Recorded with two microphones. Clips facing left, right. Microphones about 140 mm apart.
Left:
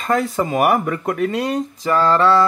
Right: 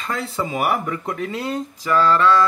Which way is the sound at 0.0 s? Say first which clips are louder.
Left 7 dB; 45° left (ahead or behind).